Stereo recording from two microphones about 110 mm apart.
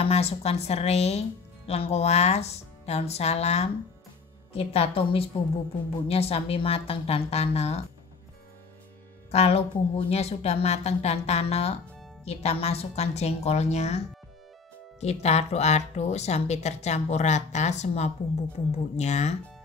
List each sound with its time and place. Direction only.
0.0 s a woman's voice: 70° left (ahead or behind)
4.5 s a woman's voice: 65° left (ahead or behind)
9.3 s a woman's voice: 70° left (ahead or behind); by 19.3 s 90° left